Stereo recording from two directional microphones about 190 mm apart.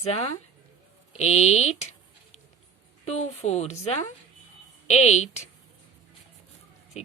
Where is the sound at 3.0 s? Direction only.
35° left (ahead or behind).